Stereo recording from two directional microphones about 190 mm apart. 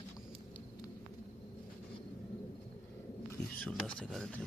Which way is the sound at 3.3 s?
10° left (ahead or behind).